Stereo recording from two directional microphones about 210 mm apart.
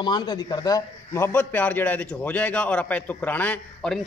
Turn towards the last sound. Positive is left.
turn(degrees=5)  # may be behind; listen again after turning